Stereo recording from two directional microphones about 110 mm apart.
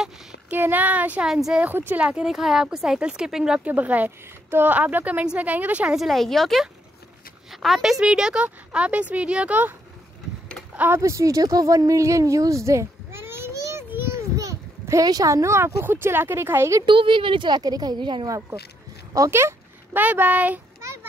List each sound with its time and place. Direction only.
0.5 s speech: 15° right (ahead or behind)
1.7 s speech: 20° right (ahead or behind)
5.9 s speech: centre (ahead or behind); by 9.8 s 15° right (ahead or behind)
11.0 s speech: 30° right (ahead or behind)
16.8 s a woman's voice: 50° right (ahead or behind)
19.1 s speech: 25° right (ahead or behind)
20.8 s children playing: 25° right (ahead or behind)